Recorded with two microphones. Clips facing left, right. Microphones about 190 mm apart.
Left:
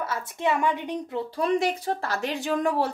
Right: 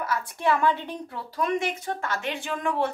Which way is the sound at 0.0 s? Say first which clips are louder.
Right 1 dB; 25° left (ahead or behind).